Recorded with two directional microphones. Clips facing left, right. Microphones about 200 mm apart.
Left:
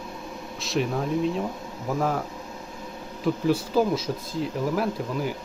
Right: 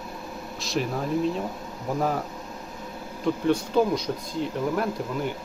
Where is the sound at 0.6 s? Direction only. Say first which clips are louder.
Left 2 dB; centre (ahead or behind).